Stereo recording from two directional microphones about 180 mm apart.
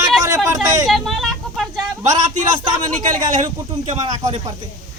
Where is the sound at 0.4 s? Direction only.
20° right (ahead or behind).